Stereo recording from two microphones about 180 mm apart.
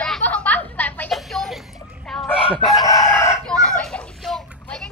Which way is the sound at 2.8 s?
15° left (ahead or behind).